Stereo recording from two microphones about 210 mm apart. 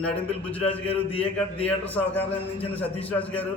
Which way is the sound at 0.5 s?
5° left (ahead or behind).